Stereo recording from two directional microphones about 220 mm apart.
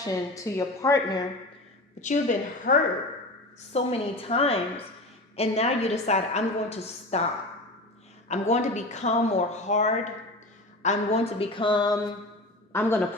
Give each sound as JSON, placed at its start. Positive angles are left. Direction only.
{"t": 0.0, "sound": "a woman's voice", "side_deg": 15}
{"t": 2.0, "sound": "a woman's voice", "side_deg": 35}
{"t": 8.3, "sound": "a woman's voice", "side_deg": 30}